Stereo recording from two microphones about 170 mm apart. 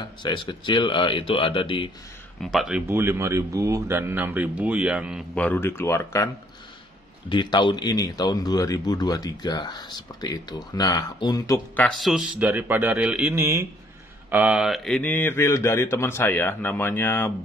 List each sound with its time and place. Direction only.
0.0 s speech: 25° left (ahead or behind)
2.5 s speech: 5° right (ahead or behind)
2.9 s speech: 15° right (ahead or behind)
5.3 s speech: 10° left (ahead or behind)
7.2 s speech: 25° left (ahead or behind)
12.0 s speech: centre (ahead or behind); by 17.3 s 15° left (ahead or behind)